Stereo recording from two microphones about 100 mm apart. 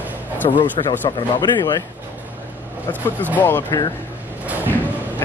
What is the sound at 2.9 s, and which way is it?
Speech, 15° left (ahead or behind).